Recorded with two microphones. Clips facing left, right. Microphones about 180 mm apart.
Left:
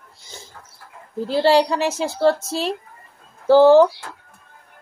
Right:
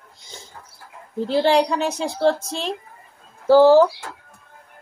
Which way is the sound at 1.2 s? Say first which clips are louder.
Left 1 dB; 5° left (ahead or behind).